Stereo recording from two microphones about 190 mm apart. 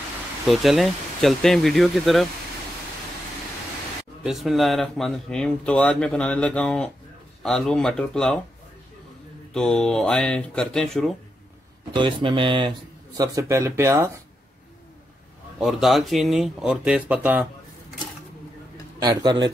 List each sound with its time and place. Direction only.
0.5 s speech: centre (ahead or behind)
4.2 s speech: centre (ahead or behind)
9.5 s speech: 5° left (ahead or behind)
11.9 s speech: 25° right (ahead or behind)
15.6 s speech: centre (ahead or behind)
18.9 s speech: 20° right (ahead or behind)